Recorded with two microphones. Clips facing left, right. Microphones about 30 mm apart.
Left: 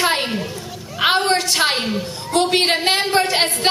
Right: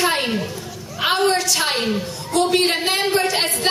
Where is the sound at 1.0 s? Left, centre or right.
Left.